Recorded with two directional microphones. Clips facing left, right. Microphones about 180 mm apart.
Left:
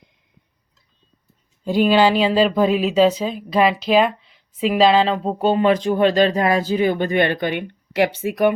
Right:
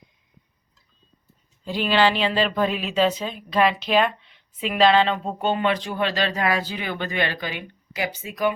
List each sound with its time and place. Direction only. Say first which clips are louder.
1.6 s speech: left 9 dB; 45° left (ahead or behind)
1.9 s speech: left 3 dB; 10° left (ahead or behind)
5.1 s speech: left 6 dB; 35° left (ahead or behind); by 8.5 s 60° left (ahead or behind)